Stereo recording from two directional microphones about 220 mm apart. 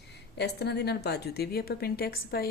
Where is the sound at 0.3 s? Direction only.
50° left (ahead or behind).